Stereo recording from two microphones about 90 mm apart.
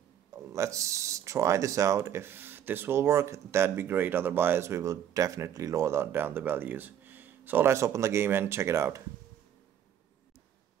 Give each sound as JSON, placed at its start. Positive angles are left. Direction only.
{"t": 0.3, "sound": "speech", "side_deg": -35}